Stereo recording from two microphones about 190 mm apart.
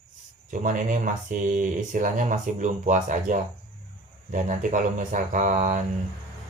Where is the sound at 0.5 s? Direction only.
40° right (ahead or behind).